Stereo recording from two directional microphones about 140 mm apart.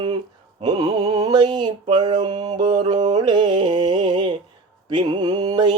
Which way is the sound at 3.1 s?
35° right (ahead or behind).